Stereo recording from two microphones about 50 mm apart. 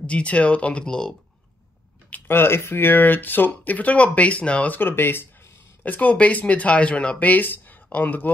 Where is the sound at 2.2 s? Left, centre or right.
Left.